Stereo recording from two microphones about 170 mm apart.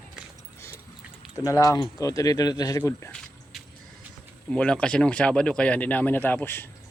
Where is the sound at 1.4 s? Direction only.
20° left (ahead or behind).